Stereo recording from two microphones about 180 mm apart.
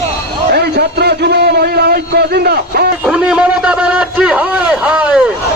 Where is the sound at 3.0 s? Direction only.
5° right (ahead or behind).